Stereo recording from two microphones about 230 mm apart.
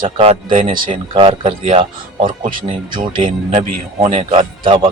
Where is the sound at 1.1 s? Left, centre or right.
Right.